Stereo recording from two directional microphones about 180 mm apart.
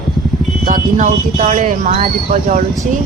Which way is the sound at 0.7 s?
45° right (ahead or behind).